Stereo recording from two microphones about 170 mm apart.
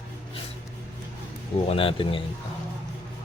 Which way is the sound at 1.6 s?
35° left (ahead or behind).